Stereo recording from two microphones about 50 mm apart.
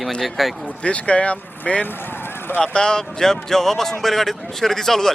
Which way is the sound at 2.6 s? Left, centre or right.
Centre.